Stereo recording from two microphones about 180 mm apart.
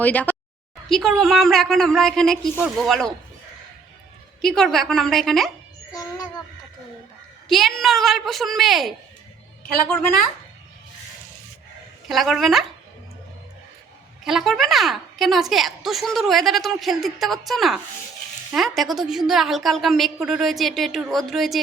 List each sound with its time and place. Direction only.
0.0 s a woman's voice: 10° left (ahead or behind)
4.4 s a woman's voice: centre (ahead or behind)
5.9 s child singing: 20° left (ahead or behind)
7.4 s a woman's voice: centre (ahead or behind)
12.0 s a woman's voice: centre (ahead or behind)
14.3 s a woman's voice: centre (ahead or behind)